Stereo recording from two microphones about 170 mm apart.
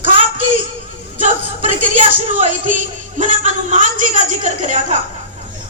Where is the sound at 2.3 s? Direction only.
50° right (ahead or behind).